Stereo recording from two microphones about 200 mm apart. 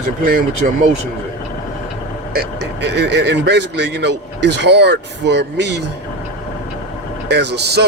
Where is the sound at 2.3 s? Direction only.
55° right (ahead or behind).